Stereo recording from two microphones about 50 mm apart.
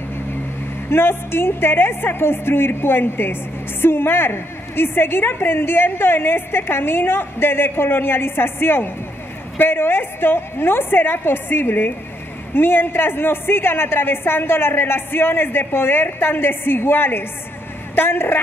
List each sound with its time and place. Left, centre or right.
0.8 s a woman's voice: left